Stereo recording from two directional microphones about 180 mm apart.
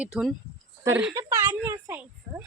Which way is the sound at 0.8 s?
10° right (ahead or behind).